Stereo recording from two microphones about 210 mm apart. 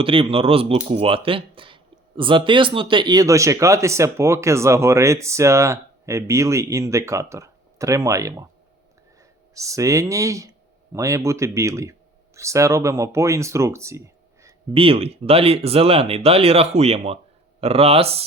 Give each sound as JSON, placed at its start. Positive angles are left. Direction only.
{"t": 0.0, "sound": "speech", "side_deg": -25}
{"t": 9.6, "sound": "speech", "side_deg": -15}
{"t": 14.7, "sound": "speech", "side_deg": -25}